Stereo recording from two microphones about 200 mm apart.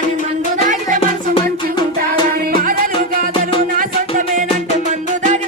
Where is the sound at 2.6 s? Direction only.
45° right (ahead or behind).